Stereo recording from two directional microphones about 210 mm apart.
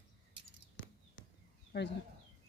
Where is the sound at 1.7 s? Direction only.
50° left (ahead or behind).